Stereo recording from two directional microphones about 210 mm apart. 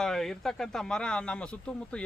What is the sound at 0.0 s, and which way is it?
Speech, centre (ahead or behind).